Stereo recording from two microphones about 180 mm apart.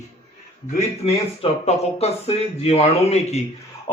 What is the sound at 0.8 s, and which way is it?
Speech, 35° left (ahead or behind).